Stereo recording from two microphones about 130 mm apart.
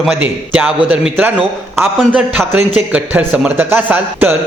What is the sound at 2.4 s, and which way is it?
Speech, 5° left (ahead or behind).